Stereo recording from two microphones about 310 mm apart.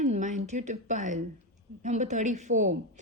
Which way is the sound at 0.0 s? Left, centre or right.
Right.